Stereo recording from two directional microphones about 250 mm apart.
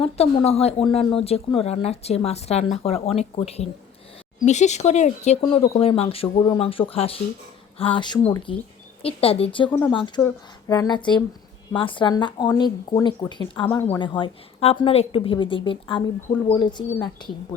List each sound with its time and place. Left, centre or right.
0.0 s speech: left